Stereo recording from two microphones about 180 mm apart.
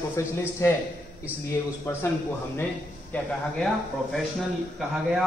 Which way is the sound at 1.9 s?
15° left (ahead or behind).